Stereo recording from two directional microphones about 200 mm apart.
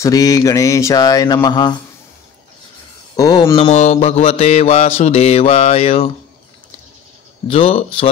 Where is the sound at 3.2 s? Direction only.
20° left (ahead or behind).